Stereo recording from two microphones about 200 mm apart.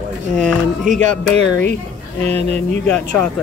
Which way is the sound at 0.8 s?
35° right (ahead or behind).